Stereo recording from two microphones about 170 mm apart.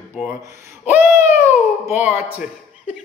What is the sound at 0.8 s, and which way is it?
Speech, 10° right (ahead or behind).